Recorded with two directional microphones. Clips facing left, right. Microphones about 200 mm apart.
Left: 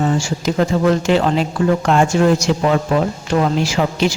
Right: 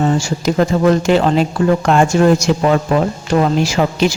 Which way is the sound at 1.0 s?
45° right (ahead or behind).